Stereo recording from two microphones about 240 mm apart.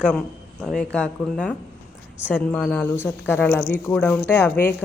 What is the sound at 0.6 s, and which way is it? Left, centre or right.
Speech, centre.